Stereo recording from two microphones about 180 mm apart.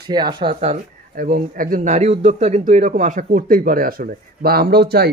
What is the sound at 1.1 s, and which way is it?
A man's voice, 50° right (ahead or behind).